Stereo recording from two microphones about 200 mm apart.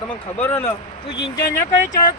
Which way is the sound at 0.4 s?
15° left (ahead or behind).